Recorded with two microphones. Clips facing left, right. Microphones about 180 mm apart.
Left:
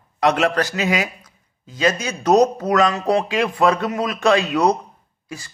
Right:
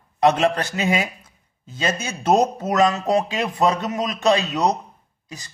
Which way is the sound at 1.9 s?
25° right (ahead or behind).